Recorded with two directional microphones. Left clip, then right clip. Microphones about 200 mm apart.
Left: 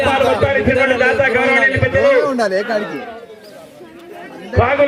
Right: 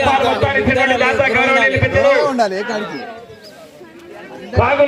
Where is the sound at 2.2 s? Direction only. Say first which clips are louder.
Even; 25° right (ahead or behind).